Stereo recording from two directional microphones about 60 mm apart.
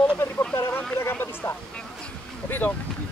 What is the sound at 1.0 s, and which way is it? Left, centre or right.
Speech, left.